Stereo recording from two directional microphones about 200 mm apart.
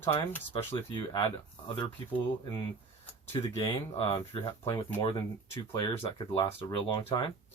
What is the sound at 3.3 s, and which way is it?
Speech, 20° left (ahead or behind).